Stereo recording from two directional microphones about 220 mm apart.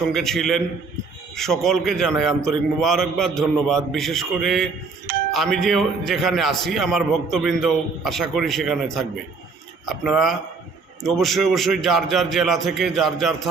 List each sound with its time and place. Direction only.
0.1 s a man's voice: centre (ahead or behind)